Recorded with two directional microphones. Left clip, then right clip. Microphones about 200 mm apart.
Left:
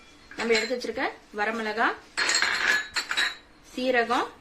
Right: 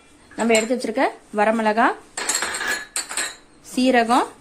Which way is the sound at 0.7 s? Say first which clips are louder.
Right 8 dB; 50° right (ahead or behind).